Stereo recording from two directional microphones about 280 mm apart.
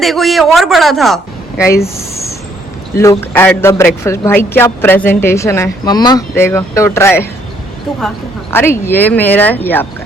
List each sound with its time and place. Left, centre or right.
0.0 s a woman's voice: centre
2.9 s a woman's voice: centre